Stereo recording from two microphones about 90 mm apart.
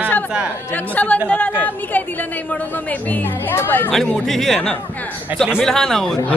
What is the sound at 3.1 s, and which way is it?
Speech, 20° left (ahead or behind).